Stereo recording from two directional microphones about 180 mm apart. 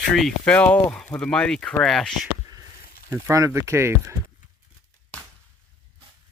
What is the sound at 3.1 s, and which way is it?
Speech, 15° right (ahead or behind).